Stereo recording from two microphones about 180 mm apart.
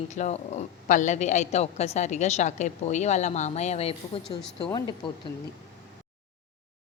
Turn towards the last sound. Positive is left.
turn(degrees=25)  # may be behind; listen again after turning